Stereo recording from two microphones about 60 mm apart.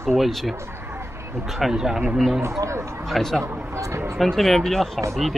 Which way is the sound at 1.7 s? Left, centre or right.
Centre.